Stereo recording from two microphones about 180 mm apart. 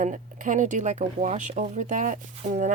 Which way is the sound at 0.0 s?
45° right (ahead or behind).